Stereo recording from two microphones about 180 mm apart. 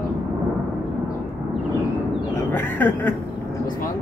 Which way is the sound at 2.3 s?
10° left (ahead or behind).